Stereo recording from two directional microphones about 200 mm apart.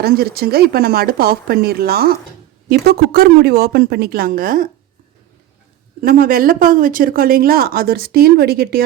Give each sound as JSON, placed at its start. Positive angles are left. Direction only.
{"t": 0.0, "sound": "speech", "side_deg": -50}
{"t": 6.0, "sound": "speech", "side_deg": -45}